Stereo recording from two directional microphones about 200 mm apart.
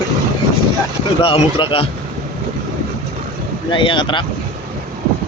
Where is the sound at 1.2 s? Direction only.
25° left (ahead or behind).